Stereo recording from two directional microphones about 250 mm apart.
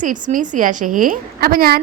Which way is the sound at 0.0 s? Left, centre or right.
Right.